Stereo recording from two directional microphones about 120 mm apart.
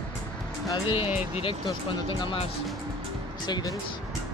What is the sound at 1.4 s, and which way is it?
Speech, 45° left (ahead or behind).